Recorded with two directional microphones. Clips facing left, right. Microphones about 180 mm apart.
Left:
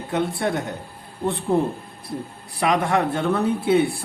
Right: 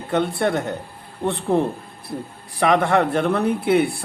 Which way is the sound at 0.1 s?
65° right (ahead or behind).